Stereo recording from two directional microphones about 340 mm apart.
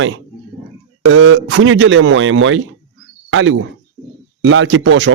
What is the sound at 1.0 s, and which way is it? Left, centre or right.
A man's voice, right.